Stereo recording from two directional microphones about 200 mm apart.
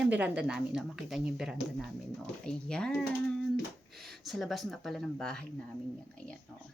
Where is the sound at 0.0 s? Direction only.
5° right (ahead or behind).